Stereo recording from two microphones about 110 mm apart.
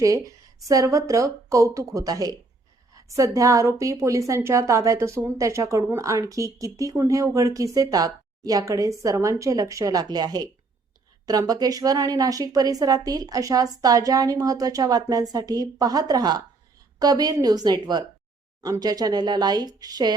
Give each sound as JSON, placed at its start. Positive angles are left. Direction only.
{"t": 0.0, "sound": "a woman's voice", "side_deg": -30}